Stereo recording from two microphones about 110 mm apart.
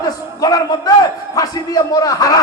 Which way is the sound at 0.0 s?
35° left (ahead or behind).